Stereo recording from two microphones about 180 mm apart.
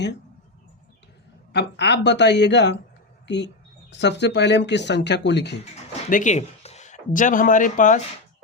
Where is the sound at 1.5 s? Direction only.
70° left (ahead or behind).